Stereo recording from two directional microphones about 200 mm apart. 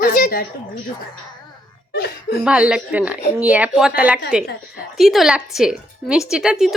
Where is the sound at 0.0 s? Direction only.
45° left (ahead or behind).